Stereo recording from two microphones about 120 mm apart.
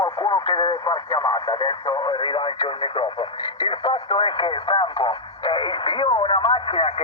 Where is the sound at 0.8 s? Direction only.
30° left (ahead or behind).